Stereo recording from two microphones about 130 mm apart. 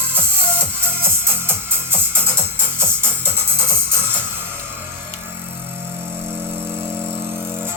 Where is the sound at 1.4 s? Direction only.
15° right (ahead or behind).